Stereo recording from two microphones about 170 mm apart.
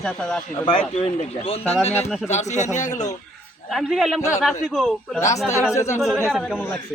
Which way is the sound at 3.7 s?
Centre (ahead or behind).